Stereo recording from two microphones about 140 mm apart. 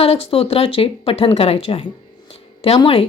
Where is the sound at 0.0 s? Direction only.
45° left (ahead or behind).